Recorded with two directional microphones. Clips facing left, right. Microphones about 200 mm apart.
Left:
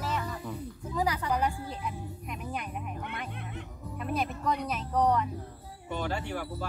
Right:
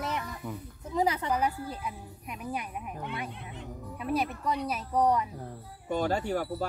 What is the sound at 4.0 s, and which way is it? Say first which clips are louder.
A man's voice: right 2 dB; 5° right (ahead or behind).